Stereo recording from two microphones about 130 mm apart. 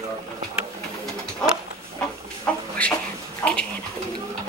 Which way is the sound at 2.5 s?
10° left (ahead or behind).